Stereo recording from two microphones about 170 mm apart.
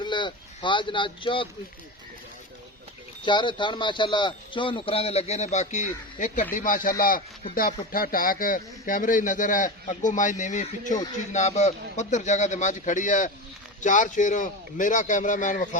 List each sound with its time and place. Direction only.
0.0 s speech: 25° left (ahead or behind)
3.2 s a man's voice: 30° left (ahead or behind); by 15.8 s 50° left (ahead or behind)